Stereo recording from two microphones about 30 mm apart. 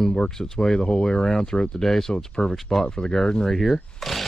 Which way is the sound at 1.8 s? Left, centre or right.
Centre.